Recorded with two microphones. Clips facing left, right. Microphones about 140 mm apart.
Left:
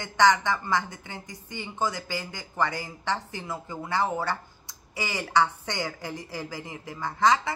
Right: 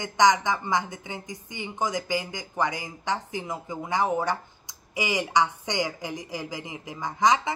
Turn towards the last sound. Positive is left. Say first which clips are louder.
# even
turn(degrees=-15)  # may be behind; listen again after turning